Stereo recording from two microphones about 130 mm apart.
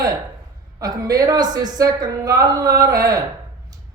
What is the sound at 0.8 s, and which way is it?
Speech, 30° right (ahead or behind).